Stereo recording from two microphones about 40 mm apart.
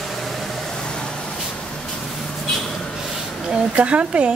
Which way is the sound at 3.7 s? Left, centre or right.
Right.